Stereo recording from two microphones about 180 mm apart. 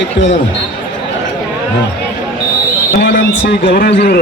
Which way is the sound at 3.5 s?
65° left (ahead or behind).